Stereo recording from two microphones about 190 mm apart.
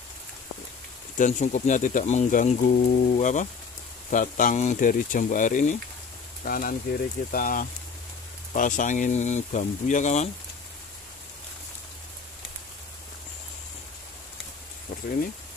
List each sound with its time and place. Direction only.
1.1 s speech: 40° left (ahead or behind)